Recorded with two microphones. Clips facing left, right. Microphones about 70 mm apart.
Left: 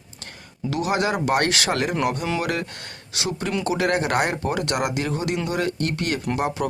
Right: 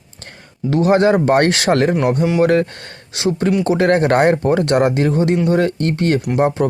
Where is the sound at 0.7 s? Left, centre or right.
Right.